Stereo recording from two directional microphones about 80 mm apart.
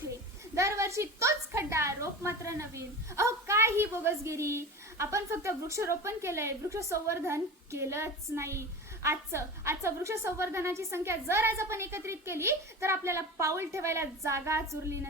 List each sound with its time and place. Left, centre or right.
0.5 s a woman's voice: right